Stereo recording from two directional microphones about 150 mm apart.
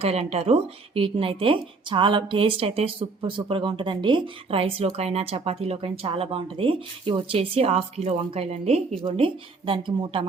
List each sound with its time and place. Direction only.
0.0 s speech: 45° right (ahead or behind)